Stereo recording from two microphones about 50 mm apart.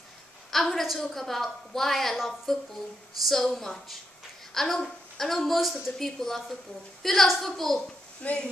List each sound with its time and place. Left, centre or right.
0.5 s a woman's voice: centre
8.2 s speech: left